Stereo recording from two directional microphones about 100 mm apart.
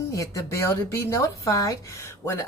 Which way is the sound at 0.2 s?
30° left (ahead or behind).